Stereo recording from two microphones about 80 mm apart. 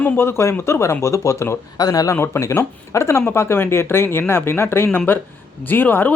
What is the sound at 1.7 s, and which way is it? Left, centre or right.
Speech, left.